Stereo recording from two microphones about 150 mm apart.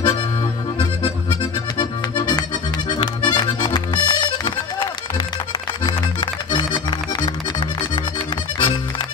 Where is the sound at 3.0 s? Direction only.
30° left (ahead or behind).